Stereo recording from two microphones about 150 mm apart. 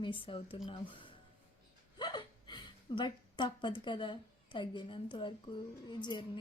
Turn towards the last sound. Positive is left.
turn(degrees=30)  # may be behind; listen again after turning